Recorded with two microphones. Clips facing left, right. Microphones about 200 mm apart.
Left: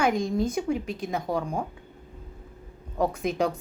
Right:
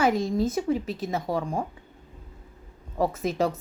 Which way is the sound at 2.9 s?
5° right (ahead or behind).